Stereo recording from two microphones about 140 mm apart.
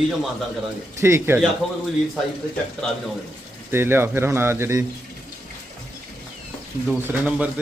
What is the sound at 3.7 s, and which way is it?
Speech, 15° right (ahead or behind).